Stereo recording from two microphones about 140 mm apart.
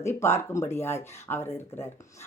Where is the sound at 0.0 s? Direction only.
20° left (ahead or behind).